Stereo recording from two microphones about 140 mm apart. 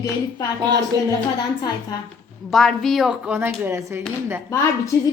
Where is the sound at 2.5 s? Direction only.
Centre (ahead or behind); by 4.0 s 15° right (ahead or behind).